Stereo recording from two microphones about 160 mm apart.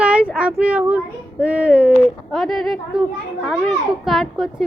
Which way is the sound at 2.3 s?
Centre (ahead or behind).